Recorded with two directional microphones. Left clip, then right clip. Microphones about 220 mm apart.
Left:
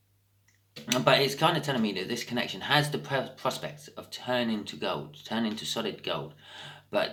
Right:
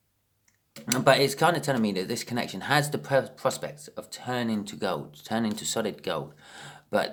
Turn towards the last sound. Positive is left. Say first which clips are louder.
# right 2 dB
turn(degrees=-55)  # may be behind; listen again after turning